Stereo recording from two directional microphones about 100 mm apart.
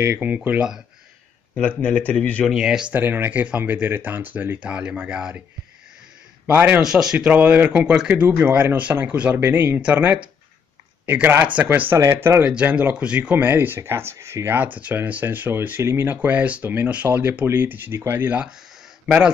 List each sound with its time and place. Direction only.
0.0 s speech: 20° right (ahead or behind)
1.5 s speech: 15° left (ahead or behind)
2.5 s speech: 5° right (ahead or behind)
2.9 s speech: 20° right (ahead or behind)
6.4 s speech: 15° right (ahead or behind)
6.8 s speech: 5° right (ahead or behind)
12.0 s speech: 30° right (ahead or behind)
19.0 s speech: 10° right (ahead or behind)